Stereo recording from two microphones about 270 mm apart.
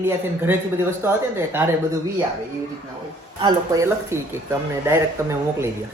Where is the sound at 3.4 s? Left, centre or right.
Centre.